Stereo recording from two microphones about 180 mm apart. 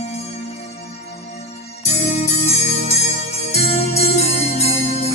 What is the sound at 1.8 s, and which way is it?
Jingle bell, 35° left (ahead or behind).